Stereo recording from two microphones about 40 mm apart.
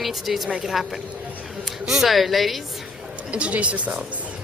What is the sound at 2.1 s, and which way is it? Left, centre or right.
Speech, centre.